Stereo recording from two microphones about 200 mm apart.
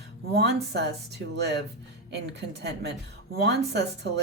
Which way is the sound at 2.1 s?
60° right (ahead or behind).